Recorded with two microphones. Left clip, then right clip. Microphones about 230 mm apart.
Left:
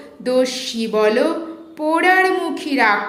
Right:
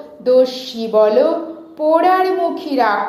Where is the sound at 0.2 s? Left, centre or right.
Left.